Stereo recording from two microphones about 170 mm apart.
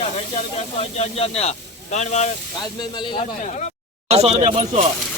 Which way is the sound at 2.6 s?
25° left (ahead or behind).